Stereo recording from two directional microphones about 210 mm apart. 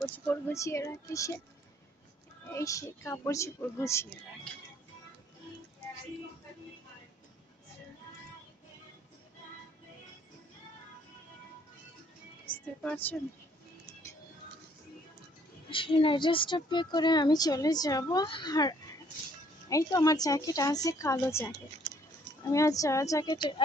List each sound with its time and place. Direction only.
0.0 s a woman's voice: 10° left (ahead or behind)
2.5 s a woman's voice: 15° left (ahead or behind)
12.4 s speech: 5° left (ahead or behind)
15.7 s a woman's voice: 25° left (ahead or behind)